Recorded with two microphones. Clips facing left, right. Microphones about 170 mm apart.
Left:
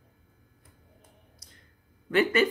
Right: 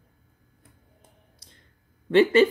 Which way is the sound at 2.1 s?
30° right (ahead or behind).